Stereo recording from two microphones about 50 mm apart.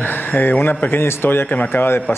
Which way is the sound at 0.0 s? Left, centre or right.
Left.